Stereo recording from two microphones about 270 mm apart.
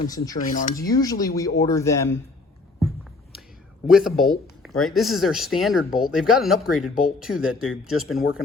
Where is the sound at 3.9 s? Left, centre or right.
Centre.